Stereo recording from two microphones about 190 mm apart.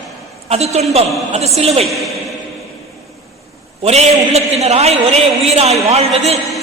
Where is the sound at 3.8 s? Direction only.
35° right (ahead or behind).